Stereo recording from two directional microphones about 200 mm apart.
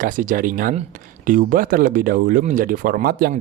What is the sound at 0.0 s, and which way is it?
Speech, 40° right (ahead or behind).